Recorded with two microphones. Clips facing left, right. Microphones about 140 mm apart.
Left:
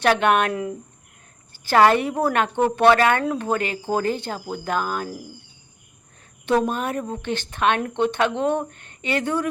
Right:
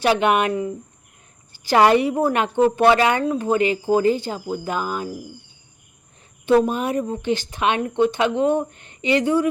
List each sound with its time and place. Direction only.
0.0 s a woman's voice: 10° right (ahead or behind)
1.5 s a woman's voice: 15° right (ahead or behind)
4.0 s speech: 60° left (ahead or behind)
4.5 s speech: 5° right (ahead or behind)
6.5 s a woman's voice: 10° right (ahead or behind)